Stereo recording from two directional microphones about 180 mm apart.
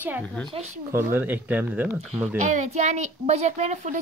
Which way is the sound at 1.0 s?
10° right (ahead or behind).